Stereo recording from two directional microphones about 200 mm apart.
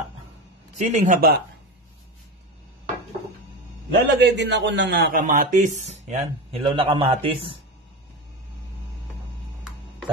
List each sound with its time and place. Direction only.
0.9 s speech: 40° right (ahead or behind)
3.9 s a man's voice: 55° right (ahead or behind)
5.2 s speech: 40° right (ahead or behind)